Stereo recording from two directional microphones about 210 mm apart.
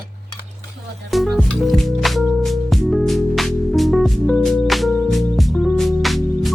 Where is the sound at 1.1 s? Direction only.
Centre (ahead or behind).